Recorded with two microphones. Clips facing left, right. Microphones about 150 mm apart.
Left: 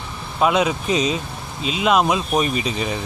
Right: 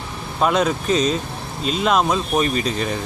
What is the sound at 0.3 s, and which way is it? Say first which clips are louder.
Speech: even; 5° left (ahead or behind).